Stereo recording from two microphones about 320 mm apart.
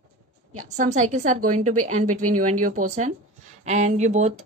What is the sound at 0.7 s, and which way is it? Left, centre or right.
Speech, right.